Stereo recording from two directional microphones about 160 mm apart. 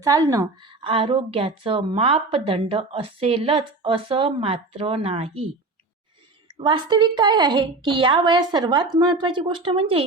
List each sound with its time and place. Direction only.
0.0 s a woman's voice: 20° right (ahead or behind); by 5.5 s 35° right (ahead or behind)
6.6 s a woman's voice: 30° right (ahead or behind)